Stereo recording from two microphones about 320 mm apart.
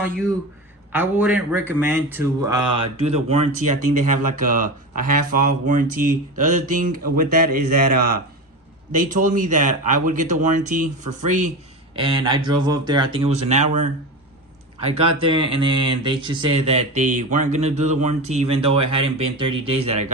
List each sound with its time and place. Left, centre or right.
0.0 s a man's voice: centre; by 7.6 s right
8.9 s speech: right
14.9 s speech: centre